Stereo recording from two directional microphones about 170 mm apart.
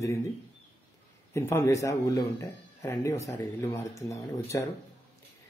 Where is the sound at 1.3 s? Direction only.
15° left (ahead or behind).